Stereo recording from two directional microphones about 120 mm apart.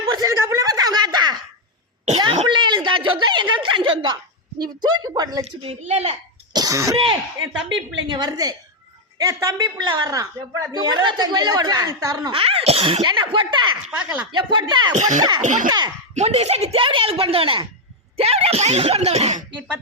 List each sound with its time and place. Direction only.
0.2 s a sound: 25° right (ahead or behind)
5.6 s speech: 65° right (ahead or behind)
6.5 s throat clearing: 30° right (ahead or behind)
6.9 s a woman's voice: 45° right (ahead or behind)
12.3 s speech: 50° right (ahead or behind)
13.0 s a woman's voice: 45° right (ahead or behind)
13.9 s speech: 10° right (ahead or behind)
14.3 s a woman's voice: 40° right (ahead or behind)
14.9 s a child's voice: 90° right
16.1 s speech: 65° right (ahead or behind)